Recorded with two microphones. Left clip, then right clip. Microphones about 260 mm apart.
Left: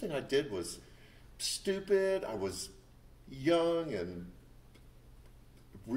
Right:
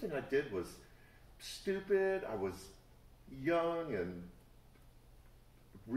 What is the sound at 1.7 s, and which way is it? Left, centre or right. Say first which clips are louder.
Speech: left 3 dB; left.